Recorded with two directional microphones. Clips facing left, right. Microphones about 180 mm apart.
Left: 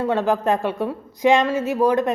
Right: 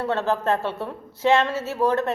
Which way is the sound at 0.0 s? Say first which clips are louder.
Left 3 dB; 15° left (ahead or behind).